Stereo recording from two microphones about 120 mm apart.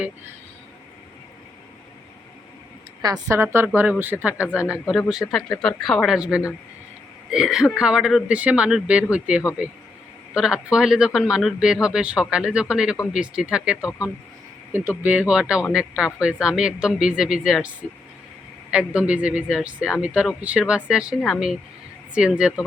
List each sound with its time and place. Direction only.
3.0 s a woman's voice: 30° right (ahead or behind)
3.3 s a woman's voice: 20° right (ahead or behind)
4.7 s a man's voice: centre (ahead or behind)
18.7 s a man's voice: 10° right (ahead or behind)